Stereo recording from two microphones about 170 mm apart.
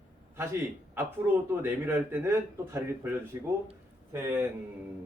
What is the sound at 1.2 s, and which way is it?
A man's voice, 10° right (ahead or behind).